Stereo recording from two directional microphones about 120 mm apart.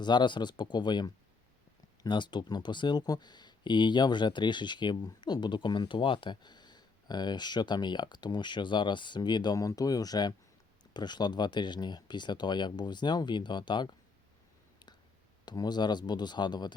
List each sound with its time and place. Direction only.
0.0 s speech: 40° left (ahead or behind)
15.4 s speech: 35° left (ahead or behind)